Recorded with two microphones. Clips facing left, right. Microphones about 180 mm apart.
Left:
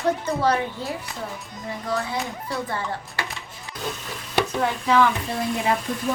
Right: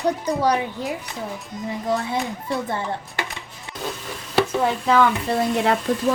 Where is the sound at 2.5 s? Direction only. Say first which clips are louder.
Right 3 dB; 20° right (ahead or behind).